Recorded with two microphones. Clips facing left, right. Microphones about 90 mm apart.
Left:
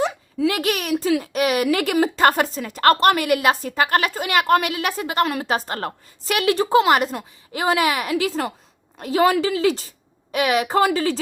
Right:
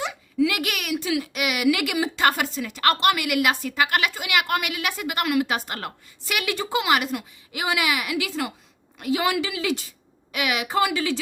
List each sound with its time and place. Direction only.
0.0 s speech: 35° left (ahead or behind)